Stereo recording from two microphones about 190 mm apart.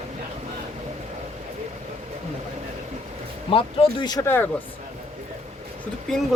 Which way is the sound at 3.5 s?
30° left (ahead or behind).